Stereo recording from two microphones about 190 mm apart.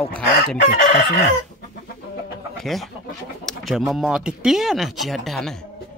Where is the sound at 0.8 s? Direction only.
40° left (ahead or behind).